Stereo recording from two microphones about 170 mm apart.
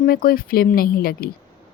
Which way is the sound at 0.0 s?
60° left (ahead or behind).